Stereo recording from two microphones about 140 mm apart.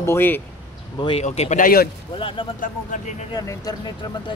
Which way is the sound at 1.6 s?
90° left.